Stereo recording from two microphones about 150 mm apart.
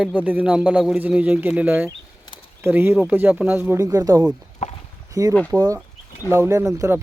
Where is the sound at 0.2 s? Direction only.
10° right (ahead or behind).